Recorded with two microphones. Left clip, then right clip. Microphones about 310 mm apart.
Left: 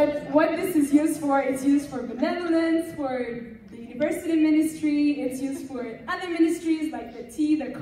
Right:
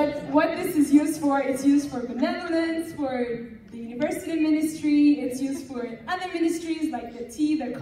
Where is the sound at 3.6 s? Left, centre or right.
Centre.